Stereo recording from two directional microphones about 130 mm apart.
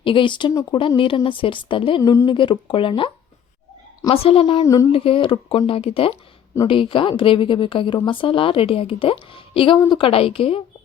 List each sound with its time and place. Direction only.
0.0 s speech: 40° left (ahead or behind)
2.0 s speech: 25° left (ahead or behind)
2.2 s speech: 40° left (ahead or behind)
4.1 s speech: 50° left (ahead or behind)
4.6 s speech: 25° left (ahead or behind)
4.9 s speech: 45° left (ahead or behind)